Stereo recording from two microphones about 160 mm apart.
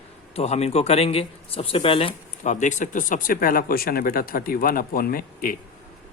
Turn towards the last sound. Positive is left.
turn(degrees=65)  # may be behind; listen again after turning